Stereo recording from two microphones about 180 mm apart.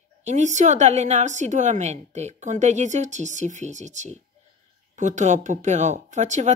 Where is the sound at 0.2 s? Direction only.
40° right (ahead or behind).